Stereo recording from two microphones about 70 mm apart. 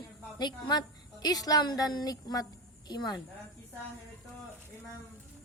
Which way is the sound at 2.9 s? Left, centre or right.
Left.